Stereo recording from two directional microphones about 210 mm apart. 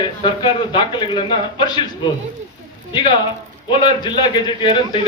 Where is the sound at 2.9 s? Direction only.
20° left (ahead or behind).